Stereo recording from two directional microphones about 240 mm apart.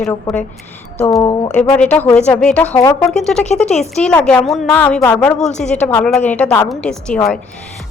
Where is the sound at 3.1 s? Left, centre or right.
Centre.